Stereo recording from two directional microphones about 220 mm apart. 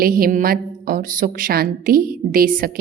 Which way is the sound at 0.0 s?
40° right (ahead or behind).